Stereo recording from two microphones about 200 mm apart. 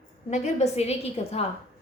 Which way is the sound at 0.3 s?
35° left (ahead or behind).